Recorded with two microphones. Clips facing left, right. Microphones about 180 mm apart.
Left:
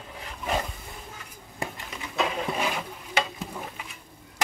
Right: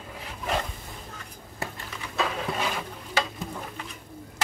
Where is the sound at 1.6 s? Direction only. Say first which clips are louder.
Left 1 dB; 15° left (ahead or behind).